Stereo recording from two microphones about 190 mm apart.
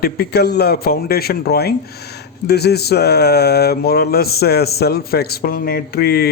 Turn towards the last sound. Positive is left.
turn(degrees=55)  # may be behind; listen again after turning